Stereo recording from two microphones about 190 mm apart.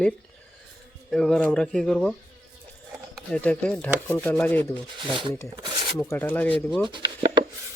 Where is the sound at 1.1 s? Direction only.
5° left (ahead or behind).